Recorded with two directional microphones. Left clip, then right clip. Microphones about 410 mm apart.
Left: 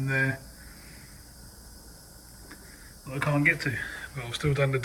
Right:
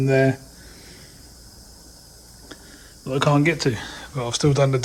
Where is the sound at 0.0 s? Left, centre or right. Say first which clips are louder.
Right 9 dB; centre.